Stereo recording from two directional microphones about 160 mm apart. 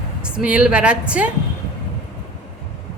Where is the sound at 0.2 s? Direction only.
5° right (ahead or behind).